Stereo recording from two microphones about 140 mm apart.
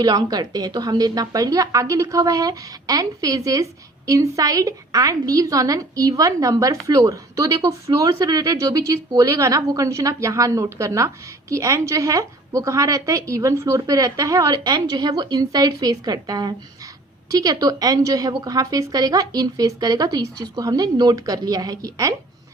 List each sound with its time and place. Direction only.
0.0 s a woman's voice: 30° right (ahead or behind)